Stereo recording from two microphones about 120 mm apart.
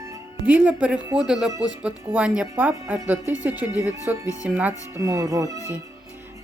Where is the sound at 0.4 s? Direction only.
10° right (ahead or behind).